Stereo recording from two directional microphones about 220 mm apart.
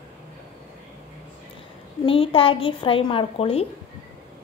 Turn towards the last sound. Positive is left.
turn(degrees=25)  # may be behind; listen again after turning